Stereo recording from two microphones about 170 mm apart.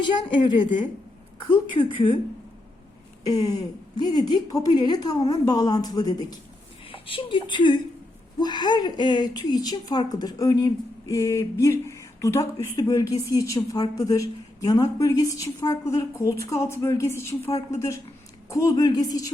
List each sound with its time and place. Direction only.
0.0 s speech: 25° left (ahead or behind)
3.2 s speech: 20° left (ahead or behind)